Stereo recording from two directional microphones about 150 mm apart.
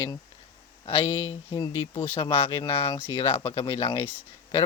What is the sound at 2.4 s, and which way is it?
A man's voice, 35° left (ahead or behind).